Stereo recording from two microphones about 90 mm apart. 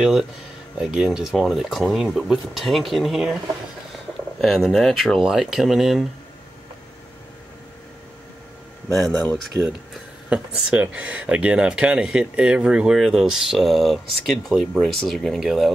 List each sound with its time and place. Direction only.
0.0 s speech: 5° right (ahead or behind)
4.4 s speech: centre (ahead or behind)
8.9 s speech: centre (ahead or behind)
9.5 s speech: 30° left (ahead or behind)
10.3 s speech: 10° right (ahead or behind)